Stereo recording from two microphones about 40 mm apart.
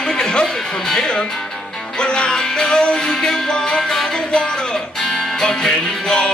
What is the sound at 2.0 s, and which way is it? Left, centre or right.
Music, left.